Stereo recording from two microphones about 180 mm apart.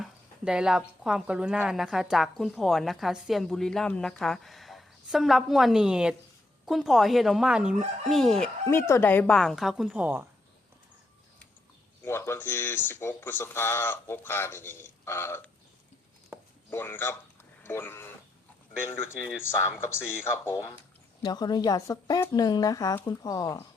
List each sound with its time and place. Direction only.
0.0 s speech: 5° right (ahead or behind)
8.7 s speech: 15° left (ahead or behind); by 10.2 s 10° right (ahead or behind)
12.0 s speech: 15° left (ahead or behind)
16.6 s speech: 10° left (ahead or behind)